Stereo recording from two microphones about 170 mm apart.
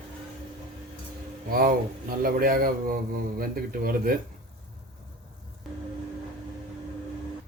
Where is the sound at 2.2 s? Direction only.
60° right (ahead or behind).